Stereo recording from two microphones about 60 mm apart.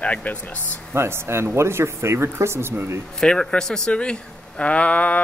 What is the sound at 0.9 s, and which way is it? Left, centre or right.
Speech, right.